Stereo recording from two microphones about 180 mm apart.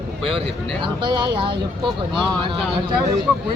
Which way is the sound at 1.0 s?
25° right (ahead or behind).